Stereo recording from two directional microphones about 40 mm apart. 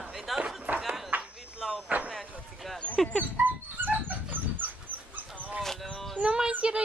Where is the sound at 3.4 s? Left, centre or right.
Right.